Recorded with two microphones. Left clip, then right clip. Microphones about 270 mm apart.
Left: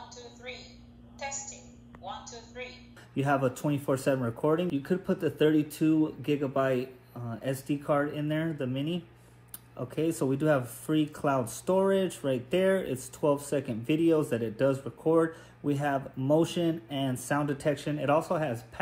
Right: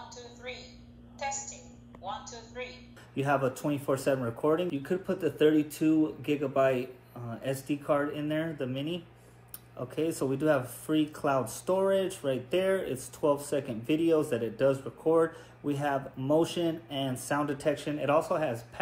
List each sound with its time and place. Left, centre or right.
0.2 s a sound: centre
1.2 s a woman's voice: centre
3.2 s speech: centre